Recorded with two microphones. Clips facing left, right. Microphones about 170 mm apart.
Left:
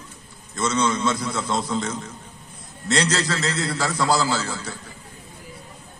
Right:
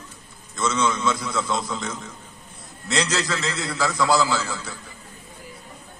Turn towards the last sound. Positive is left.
turn(degrees=35)  # may be behind; listen again after turning